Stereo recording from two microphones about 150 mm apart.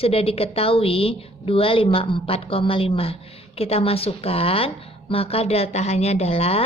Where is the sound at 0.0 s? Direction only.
40° left (ahead or behind).